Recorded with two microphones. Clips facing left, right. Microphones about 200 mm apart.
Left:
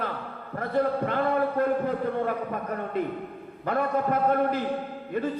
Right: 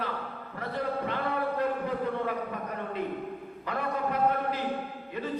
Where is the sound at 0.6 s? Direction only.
50° left (ahead or behind).